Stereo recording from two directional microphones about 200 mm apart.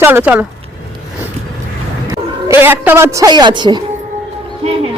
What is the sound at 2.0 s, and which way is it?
A man's voice, 15° right (ahead or behind).